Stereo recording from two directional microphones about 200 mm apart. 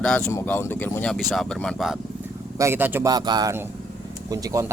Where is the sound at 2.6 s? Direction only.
10° right (ahead or behind).